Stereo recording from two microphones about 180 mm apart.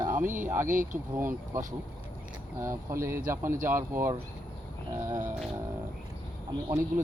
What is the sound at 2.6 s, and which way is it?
Speech, 15° right (ahead or behind).